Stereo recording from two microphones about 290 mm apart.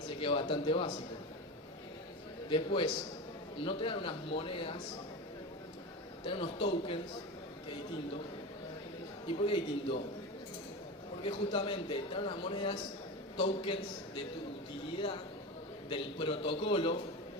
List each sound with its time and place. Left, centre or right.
0.1 s a man's voice: centre
2.5 s a man's voice: centre
6.2 s a man's voice: centre
9.2 s a man's voice: centre
11.2 s a man's voice: centre
14.9 s a man's voice: centre